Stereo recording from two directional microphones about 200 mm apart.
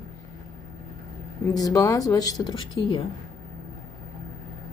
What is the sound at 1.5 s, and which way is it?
A woman's voice, 20° left (ahead or behind).